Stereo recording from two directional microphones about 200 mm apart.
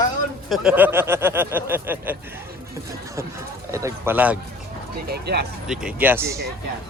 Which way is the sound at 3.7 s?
15° right (ahead or behind).